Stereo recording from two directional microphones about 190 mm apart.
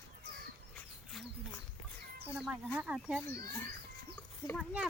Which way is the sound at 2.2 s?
5° right (ahead or behind).